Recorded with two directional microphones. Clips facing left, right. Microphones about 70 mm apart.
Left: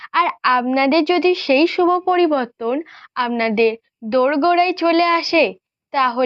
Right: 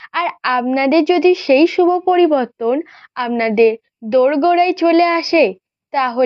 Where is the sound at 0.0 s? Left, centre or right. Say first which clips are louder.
Left 2 dB; centre.